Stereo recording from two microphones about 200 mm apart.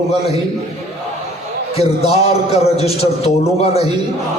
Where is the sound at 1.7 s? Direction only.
30° left (ahead or behind).